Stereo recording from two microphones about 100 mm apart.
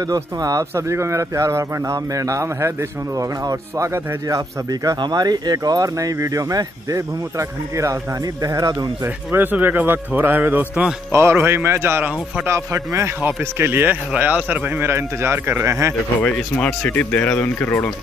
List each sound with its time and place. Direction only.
0.0 s speech: 40° right (ahead or behind)
9.0 s a man's voice: 20° right (ahead or behind)
16.2 s speech: 15° left (ahead or behind)